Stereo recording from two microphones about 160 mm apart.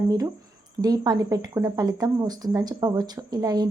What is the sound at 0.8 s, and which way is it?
Speech, 25° right (ahead or behind).